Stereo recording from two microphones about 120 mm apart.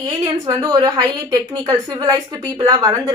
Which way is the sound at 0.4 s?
30° right (ahead or behind).